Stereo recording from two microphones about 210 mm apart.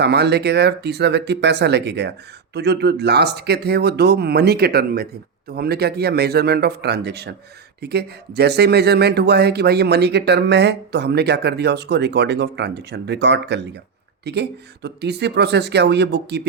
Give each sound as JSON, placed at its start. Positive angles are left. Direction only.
{"t": 0.0, "sound": "speech", "side_deg": -50}